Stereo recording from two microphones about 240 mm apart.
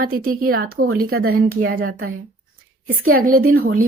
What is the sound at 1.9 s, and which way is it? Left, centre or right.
Speech, right.